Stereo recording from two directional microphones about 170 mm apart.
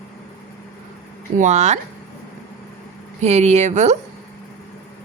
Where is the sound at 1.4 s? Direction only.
45° right (ahead or behind).